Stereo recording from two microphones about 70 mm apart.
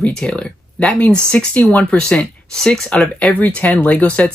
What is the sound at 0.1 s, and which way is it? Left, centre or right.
Speech, centre.